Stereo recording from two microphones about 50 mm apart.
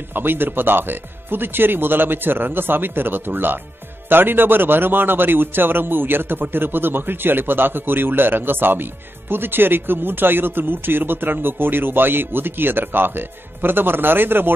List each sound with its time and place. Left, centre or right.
0.1 s speech: right